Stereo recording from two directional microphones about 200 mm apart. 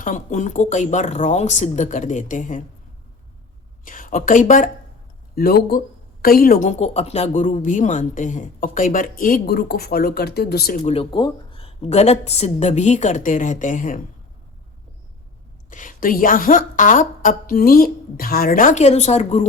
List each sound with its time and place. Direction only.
0.0 s a woman's voice: 40° left (ahead or behind)
3.8 s a woman's voice: 40° left (ahead or behind)
10.8 s a woman's voice: 25° left (ahead or behind)
15.7 s a woman's voice: 40° left (ahead or behind)